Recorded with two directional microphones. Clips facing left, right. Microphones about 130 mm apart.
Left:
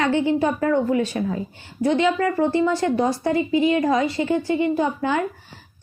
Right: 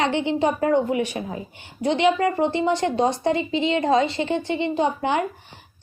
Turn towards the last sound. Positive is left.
turn(degrees=-20)  # may be behind; listen again after turning